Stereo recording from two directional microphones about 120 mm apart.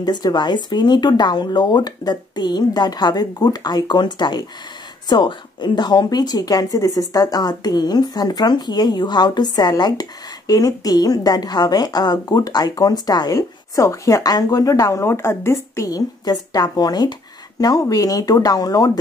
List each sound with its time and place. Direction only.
0.0 s speech: 35° left (ahead or behind)